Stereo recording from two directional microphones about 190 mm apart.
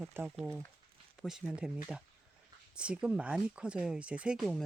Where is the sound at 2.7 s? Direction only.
5° right (ahead or behind).